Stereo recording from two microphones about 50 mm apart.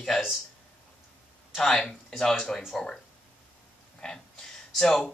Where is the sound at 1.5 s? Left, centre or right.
Centre.